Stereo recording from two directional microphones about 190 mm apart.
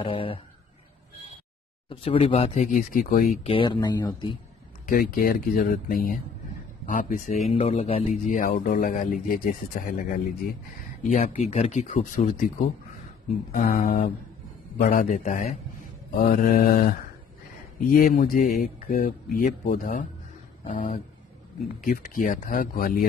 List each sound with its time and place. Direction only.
0.0 s speech: 30° left (ahead or behind)
1.9 s speech: 30° left (ahead or behind); by 3.3 s 45° left (ahead or behind)
3.4 s speech: 25° left (ahead or behind)
4.8 s speech: 50° left (ahead or behind)
17.9 s speech: 50° left (ahead or behind)